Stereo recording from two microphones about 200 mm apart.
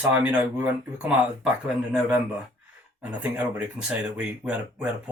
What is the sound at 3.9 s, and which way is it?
Speech, 5° right (ahead or behind).